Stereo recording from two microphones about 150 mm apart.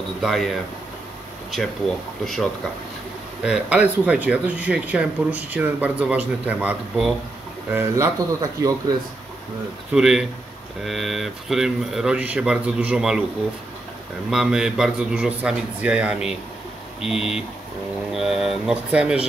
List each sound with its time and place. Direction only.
0.2 s speech: centre (ahead or behind)
3.4 s speech: 5° right (ahead or behind)
7.7 s speech: 15° right (ahead or behind)
9.9 s speech: 5° right (ahead or behind)
14.3 s speech: 5° right (ahead or behind)